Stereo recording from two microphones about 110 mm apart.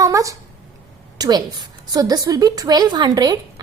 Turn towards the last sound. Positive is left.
turn(degrees=-35)  # may be behind; listen again after turning